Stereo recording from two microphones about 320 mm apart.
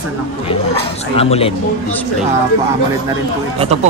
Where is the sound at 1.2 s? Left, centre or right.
Centre.